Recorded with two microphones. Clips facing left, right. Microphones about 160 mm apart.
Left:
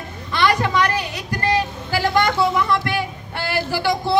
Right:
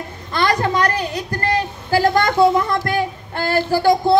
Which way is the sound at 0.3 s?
40° right (ahead or behind).